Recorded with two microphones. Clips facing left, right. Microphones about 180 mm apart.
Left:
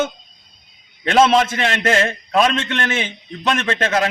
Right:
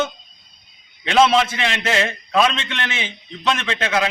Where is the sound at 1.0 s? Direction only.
45° left (ahead or behind).